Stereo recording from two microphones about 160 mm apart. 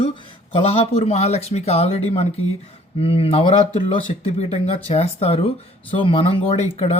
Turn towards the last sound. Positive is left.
turn(degrees=40)  # may be behind; listen again after turning